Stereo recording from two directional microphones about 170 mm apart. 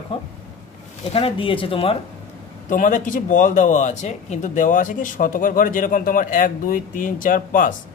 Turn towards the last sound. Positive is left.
turn(degrees=50)  # may be behind; listen again after turning